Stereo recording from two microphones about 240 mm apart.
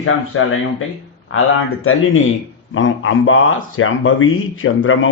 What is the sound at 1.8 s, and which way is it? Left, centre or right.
Speech, left.